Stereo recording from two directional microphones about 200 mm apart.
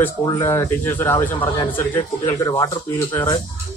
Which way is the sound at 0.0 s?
15° left (ahead or behind).